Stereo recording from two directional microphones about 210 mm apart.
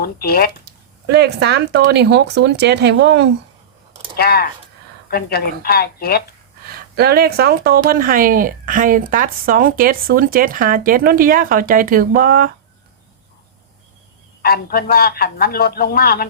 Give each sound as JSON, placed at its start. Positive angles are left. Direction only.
{"t": 0.0, "sound": "a man's voice", "side_deg": 45}
{"t": 1.0, "sound": "speech", "side_deg": -55}
{"t": 4.2, "sound": "a man's voice", "side_deg": 45}
{"t": 6.7, "sound": "a woman's voice", "side_deg": -50}
{"t": 14.4, "sound": "a man's voice", "side_deg": 45}